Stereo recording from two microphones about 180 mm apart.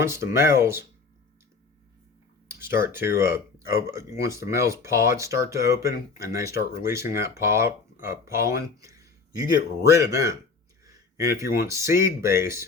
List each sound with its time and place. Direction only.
0.0 s speech: 15° right (ahead or behind)
2.5 s speech: 15° right (ahead or behind)